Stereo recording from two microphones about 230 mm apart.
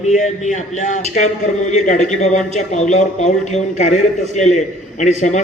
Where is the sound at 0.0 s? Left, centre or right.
Left.